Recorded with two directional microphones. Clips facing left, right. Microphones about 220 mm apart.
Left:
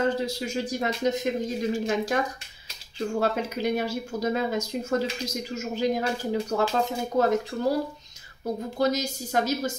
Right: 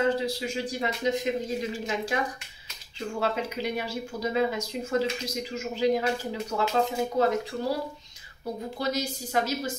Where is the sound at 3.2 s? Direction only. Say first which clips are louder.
Left 1 dB; 45° left (ahead or behind).